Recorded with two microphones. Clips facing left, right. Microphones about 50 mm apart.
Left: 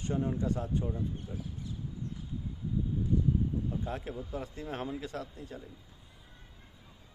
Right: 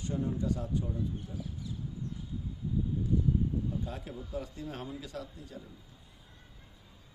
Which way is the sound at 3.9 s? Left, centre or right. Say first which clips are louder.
Left 3 dB; left.